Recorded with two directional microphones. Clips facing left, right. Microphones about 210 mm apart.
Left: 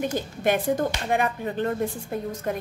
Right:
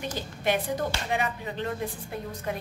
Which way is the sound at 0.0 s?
50° left (ahead or behind).